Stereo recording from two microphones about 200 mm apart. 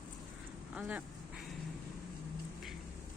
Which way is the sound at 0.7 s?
10° right (ahead or behind).